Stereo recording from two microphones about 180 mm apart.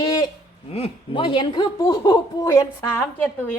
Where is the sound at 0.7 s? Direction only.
30° left (ahead or behind).